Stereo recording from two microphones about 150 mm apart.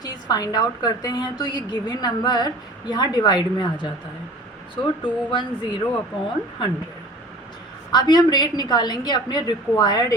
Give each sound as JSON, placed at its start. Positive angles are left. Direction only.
{"t": 0.0, "sound": "a woman's voice", "side_deg": 25}
{"t": 7.9, "sound": "a woman's voice", "side_deg": 30}